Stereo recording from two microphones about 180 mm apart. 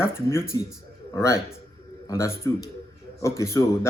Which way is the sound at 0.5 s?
20° left (ahead or behind).